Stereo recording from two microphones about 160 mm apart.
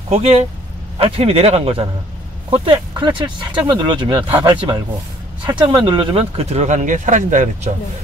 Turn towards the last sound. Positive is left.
turn(degrees=-50)  # may be behind; listen again after turning